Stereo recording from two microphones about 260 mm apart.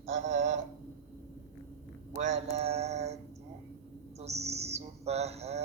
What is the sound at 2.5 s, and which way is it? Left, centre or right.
Bird, right.